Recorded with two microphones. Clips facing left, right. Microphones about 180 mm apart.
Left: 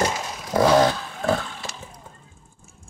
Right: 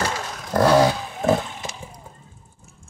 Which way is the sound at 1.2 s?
20° right (ahead or behind).